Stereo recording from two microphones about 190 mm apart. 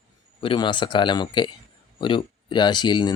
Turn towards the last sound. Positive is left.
turn(degrees=25)  # may be behind; listen again after turning